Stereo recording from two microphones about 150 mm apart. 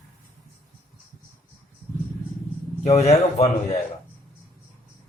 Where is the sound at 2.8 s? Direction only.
45° left (ahead or behind).